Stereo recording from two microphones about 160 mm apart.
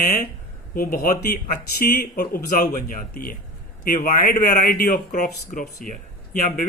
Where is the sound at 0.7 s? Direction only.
65° left (ahead or behind).